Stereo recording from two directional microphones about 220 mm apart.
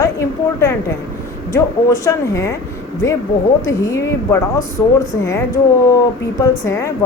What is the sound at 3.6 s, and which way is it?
A woman's voice, 15° left (ahead or behind).